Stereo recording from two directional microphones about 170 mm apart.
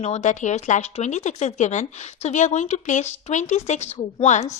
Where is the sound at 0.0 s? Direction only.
40° left (ahead or behind).